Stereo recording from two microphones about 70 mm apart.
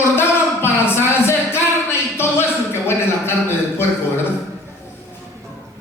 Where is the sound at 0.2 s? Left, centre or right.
Left.